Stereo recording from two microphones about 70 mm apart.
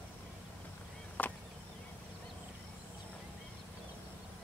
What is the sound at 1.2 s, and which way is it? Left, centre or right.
Chop, left.